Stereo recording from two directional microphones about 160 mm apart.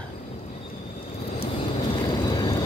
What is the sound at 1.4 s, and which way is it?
Vehicle, 30° left (ahead or behind).